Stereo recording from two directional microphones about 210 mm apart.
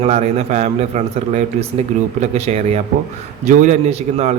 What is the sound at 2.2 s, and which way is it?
A man's voice, 30° right (ahead or behind).